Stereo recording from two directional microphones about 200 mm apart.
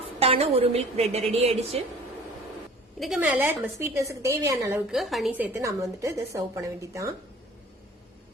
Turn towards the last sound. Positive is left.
turn(degrees=-15)  # may be behind; listen again after turning